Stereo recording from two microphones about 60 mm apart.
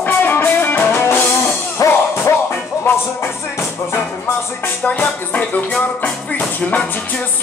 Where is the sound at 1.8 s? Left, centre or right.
Left.